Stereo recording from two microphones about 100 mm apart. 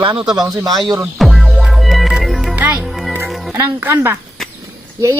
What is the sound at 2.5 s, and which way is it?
Music, 15° right (ahead or behind).